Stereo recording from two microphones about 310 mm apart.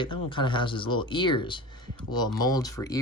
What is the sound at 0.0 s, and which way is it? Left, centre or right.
Speech, centre.